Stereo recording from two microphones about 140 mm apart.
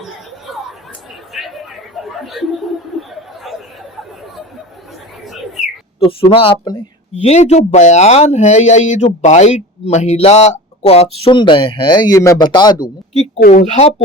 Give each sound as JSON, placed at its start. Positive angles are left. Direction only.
{"t": 1.3, "sound": "chatter", "side_deg": 0}
{"t": 5.2, "sound": "bird", "side_deg": 0}
{"t": 6.0, "sound": "speech", "side_deg": 40}
{"t": 7.2, "sound": "speech", "side_deg": 50}
{"t": 13.4, "sound": "speech", "side_deg": 90}